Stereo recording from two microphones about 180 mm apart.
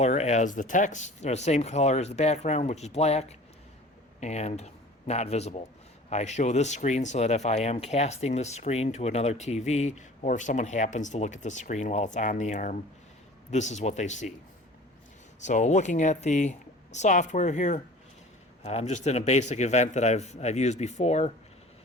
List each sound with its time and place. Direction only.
0.0 s speech: 40° left (ahead or behind)
15.4 s speech: 40° left (ahead or behind)